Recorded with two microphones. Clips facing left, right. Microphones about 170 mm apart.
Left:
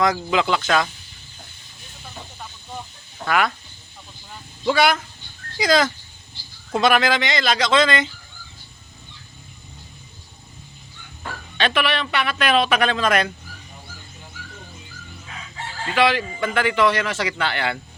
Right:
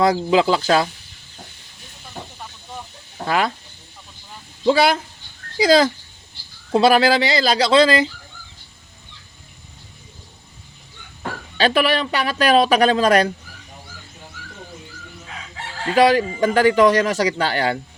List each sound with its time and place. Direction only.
0.0 s speech: 30° right (ahead or behind)
3.2 s speech: 30° right (ahead or behind)
4.6 s speech: 30° right (ahead or behind)
11.5 s speech: 35° right (ahead or behind)
16.0 s speech: 40° right (ahead or behind)